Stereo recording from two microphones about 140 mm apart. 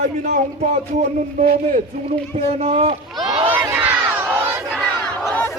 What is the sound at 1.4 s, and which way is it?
Speech, 80° right.